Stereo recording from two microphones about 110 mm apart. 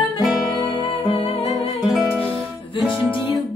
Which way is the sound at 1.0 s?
55° left (ahead or behind).